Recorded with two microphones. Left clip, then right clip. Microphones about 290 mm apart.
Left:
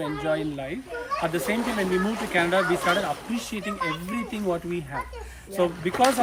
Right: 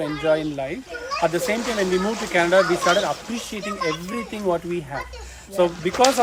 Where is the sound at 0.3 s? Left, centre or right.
Centre.